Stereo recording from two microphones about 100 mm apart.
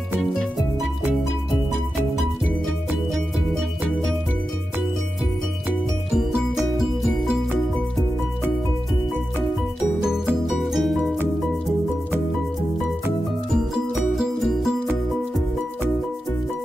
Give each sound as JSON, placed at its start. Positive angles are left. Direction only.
{"t": 10.0, "sound": "music", "side_deg": -5}
{"t": 13.9, "sound": "music", "side_deg": -5}